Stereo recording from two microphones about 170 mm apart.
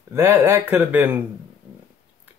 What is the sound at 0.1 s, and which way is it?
Speech, 15° right (ahead or behind).